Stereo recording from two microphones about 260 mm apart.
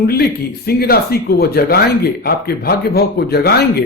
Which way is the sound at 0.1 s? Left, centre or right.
Left.